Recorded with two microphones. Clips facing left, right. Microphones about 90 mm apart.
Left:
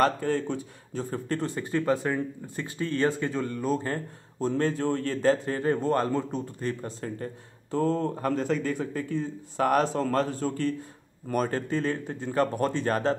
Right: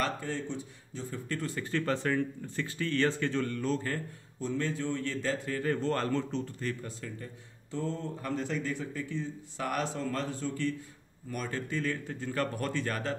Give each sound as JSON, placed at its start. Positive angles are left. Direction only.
{"t": 0.0, "sound": "speech", "side_deg": 50}
{"t": 1.4, "sound": "speech", "side_deg": 20}
{"t": 3.8, "sound": "speech", "side_deg": 35}
{"t": 5.8, "sound": "speech", "side_deg": 15}
{"t": 6.7, "sound": "speech", "side_deg": 40}